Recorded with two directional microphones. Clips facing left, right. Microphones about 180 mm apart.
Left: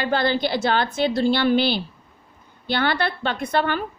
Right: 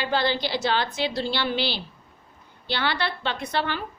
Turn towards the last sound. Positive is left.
turn(degrees=50)  # may be behind; listen again after turning